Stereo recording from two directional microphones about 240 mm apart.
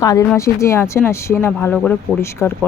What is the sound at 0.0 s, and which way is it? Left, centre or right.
Speech, centre.